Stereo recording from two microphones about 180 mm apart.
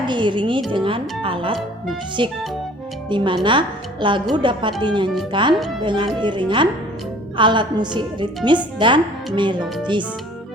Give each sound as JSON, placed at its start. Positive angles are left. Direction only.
{"t": 0.1, "sound": "speech", "side_deg": -25}